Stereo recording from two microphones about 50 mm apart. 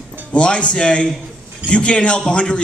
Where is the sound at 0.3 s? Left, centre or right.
Left.